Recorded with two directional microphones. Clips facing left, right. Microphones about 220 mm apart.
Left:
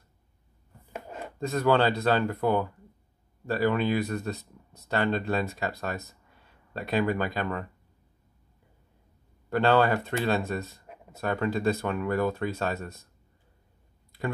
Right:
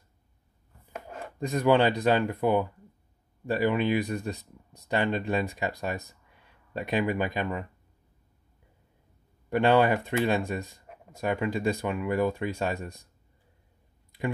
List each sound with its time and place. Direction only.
1.4 s speech: 15° right (ahead or behind)
9.5 s speech: 15° right (ahead or behind)